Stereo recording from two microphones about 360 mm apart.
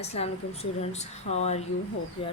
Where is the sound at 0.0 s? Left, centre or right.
Centre.